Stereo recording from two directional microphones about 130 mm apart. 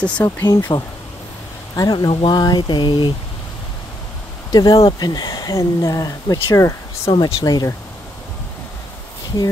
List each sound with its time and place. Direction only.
0.0 s speech: 15° left (ahead or behind); by 3.1 s 40° left (ahead or behind)
4.5 s speech: 30° left (ahead or behind)
7.1 s speech: 35° left (ahead or behind)